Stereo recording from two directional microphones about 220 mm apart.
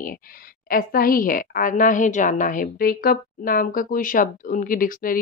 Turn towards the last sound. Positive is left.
turn(degrees=40)  # may be behind; listen again after turning